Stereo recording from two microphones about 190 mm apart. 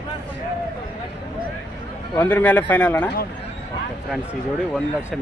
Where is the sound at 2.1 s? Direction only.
10° left (ahead or behind).